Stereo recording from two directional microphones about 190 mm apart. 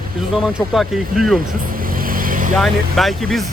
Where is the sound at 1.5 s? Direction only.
50° right (ahead or behind).